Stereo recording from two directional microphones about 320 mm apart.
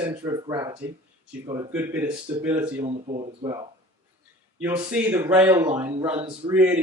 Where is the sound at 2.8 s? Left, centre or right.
Centre.